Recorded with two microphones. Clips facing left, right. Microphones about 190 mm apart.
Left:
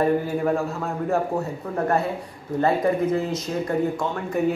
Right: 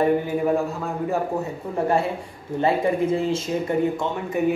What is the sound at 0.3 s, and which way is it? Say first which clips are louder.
Speech: right 1 dB; 5° right (ahead or behind).